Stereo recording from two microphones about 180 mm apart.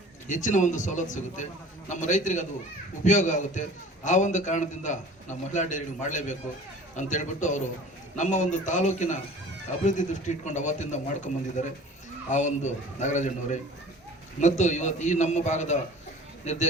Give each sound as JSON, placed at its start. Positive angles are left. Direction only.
{"t": 0.3, "sound": "a man's voice", "side_deg": 45}